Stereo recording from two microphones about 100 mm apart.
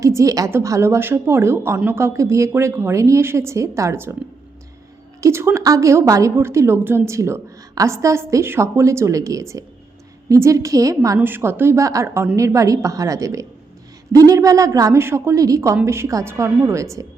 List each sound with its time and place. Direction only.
0.0 s a woman's voice: 30° right (ahead or behind)
5.2 s a woman's voice: 25° right (ahead or behind)
11.2 s a woman's voice: 20° right (ahead or behind)